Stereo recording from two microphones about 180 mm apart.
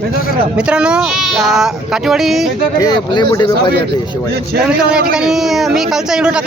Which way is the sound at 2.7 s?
20° left (ahead or behind).